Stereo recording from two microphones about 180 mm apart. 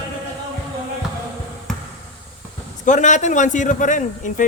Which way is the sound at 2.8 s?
45° left (ahead or behind).